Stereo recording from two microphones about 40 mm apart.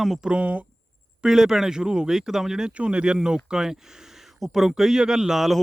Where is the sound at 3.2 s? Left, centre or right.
Centre.